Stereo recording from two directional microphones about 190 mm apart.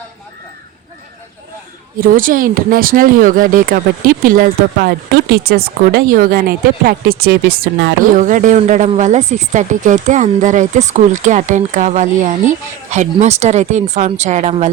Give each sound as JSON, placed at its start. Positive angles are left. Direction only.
{"t": 2.0, "sound": "speech", "side_deg": -45}
{"t": 8.2, "sound": "speech", "side_deg": -40}